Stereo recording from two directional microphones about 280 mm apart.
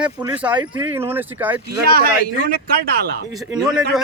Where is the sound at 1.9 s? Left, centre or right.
Right.